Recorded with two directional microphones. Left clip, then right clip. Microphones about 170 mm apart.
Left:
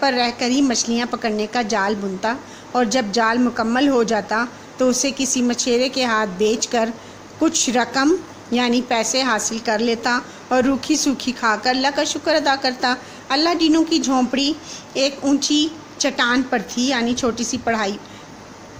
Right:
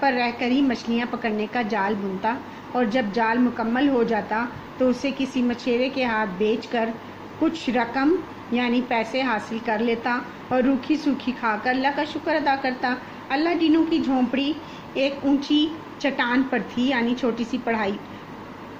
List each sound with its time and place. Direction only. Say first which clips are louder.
0.0 s a woman's voice: left 3 dB; 65° left (ahead or behind)